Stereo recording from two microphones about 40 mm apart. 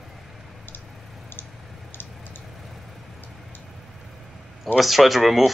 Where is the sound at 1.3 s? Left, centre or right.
Left.